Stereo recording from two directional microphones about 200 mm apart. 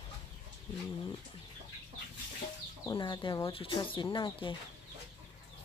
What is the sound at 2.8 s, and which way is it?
Speech, 25° left (ahead or behind).